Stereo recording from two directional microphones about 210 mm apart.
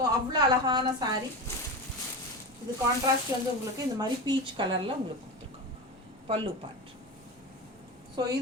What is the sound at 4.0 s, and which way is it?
Speech, 20° right (ahead or behind).